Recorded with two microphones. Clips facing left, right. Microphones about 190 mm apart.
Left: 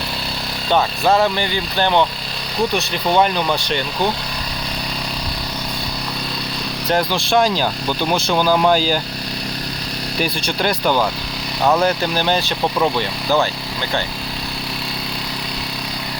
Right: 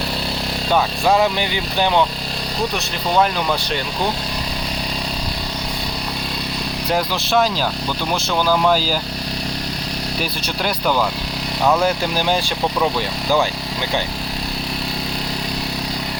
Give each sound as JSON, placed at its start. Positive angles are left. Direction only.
{"t": 1.0, "sound": "speech", "side_deg": -5}
{"t": 6.9, "sound": "speech", "side_deg": -5}
{"t": 8.3, "sound": "speech", "side_deg": 25}
{"t": 8.7, "sound": "speech", "side_deg": -5}
{"t": 10.2, "sound": "speech", "side_deg": -5}